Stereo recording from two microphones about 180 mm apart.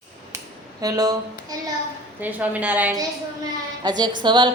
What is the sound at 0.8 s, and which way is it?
Speech, 20° right (ahead or behind).